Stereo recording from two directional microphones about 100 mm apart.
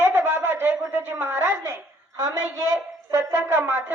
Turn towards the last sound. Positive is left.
turn(degrees=-20)  # may be behind; listen again after turning